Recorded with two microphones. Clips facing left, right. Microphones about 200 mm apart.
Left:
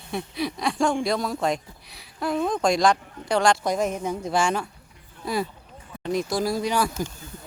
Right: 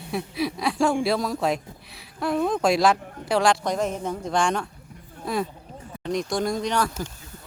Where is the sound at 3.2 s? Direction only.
Centre (ahead or behind).